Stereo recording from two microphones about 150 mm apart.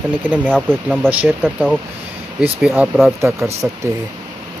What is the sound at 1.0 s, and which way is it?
Speech, 10° right (ahead or behind).